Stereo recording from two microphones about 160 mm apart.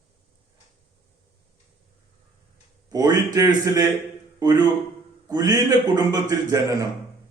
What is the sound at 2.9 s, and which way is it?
Speech, 20° right (ahead or behind).